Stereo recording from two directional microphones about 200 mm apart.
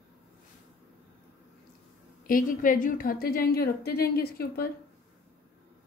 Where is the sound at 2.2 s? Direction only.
45° left (ahead or behind).